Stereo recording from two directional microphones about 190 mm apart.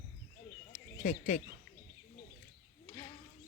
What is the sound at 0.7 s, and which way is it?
Bird, 40° left (ahead or behind).